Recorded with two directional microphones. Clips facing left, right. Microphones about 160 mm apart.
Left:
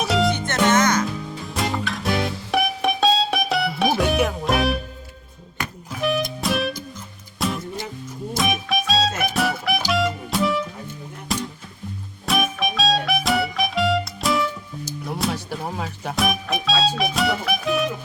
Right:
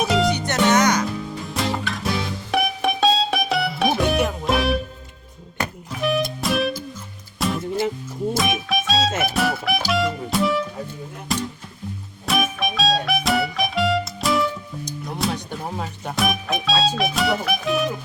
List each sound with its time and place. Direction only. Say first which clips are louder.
0.0 s music: right 1 dB; centre (ahead or behind)
0.3 s music: right 1 dB; 15° right (ahead or behind)
1.5 s music: even; centre (ahead or behind)
5.9 s music: even; centre (ahead or behind)